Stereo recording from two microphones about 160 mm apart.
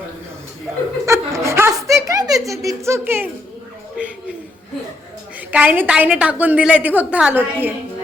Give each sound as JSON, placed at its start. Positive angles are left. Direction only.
{"t": 1.0, "sound": "chuckle", "side_deg": -20}
{"t": 2.5, "sound": "a woman's voice", "side_deg": -20}
{"t": 5.5, "sound": "a woman's voice", "side_deg": -10}